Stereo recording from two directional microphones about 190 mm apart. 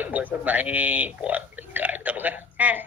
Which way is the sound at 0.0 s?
10° right (ahead or behind).